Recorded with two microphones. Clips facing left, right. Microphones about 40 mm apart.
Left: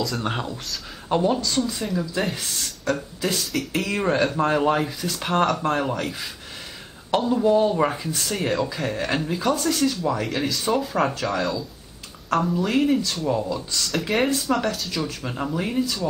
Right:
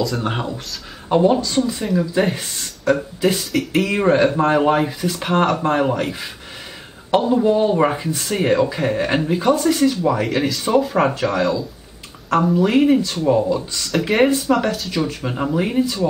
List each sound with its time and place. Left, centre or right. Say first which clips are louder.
0.0 s speech: right 4 dB; centre
2.6 s speech: right 8 dB; centre
8.1 s speech: right 5 dB; centre
8.4 s speech: right 8 dB; right
10.2 s speech: right 4 dB; centre
11.0 s speech: right 5 dB; centre
12.6 s speech: right 6 dB; right
14.5 s speech: right 5 dB; centre
14.9 s speech: right 6 dB; centre